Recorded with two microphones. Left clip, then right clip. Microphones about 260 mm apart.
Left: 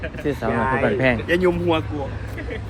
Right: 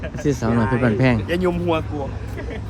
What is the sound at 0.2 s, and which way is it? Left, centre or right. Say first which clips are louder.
Speech: right 2 dB; right.